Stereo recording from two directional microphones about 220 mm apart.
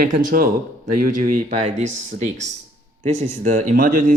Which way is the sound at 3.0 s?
30° right (ahead or behind).